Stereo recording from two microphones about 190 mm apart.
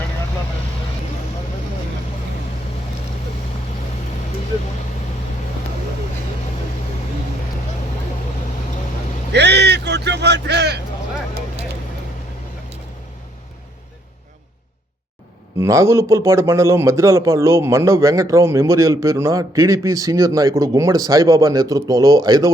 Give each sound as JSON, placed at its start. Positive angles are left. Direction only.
{"t": 9.3, "sound": "vehicle", "side_deg": -60}
{"t": 15.5, "sound": "a man's voice", "side_deg": -15}